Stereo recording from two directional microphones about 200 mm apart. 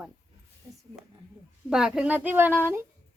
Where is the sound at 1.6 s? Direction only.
5° right (ahead or behind).